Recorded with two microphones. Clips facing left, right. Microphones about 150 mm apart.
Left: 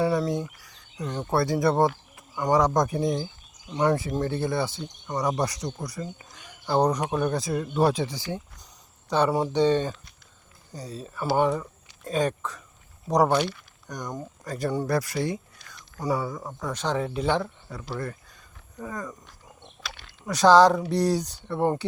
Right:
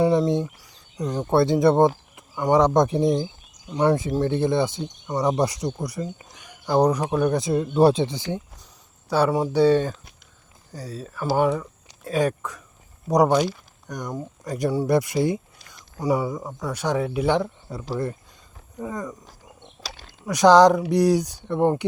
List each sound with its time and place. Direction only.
0.0 s speech: 20° right (ahead or behind)
0.9 s speech: 15° right (ahead or behind)
3.7 s speech: 10° right (ahead or behind)
7.3 s speech: 20° right (ahead or behind)
9.0 s speech: 5° right (ahead or behind); by 15.4 s 25° right (ahead or behind)
16.0 s speech: 15° right (ahead or behind)
17.7 s speech: 30° right (ahead or behind)
18.8 s speech: 15° right (ahead or behind)
19.8 s a sound: 40° right (ahead or behind)
20.2 s speech: 15° right (ahead or behind)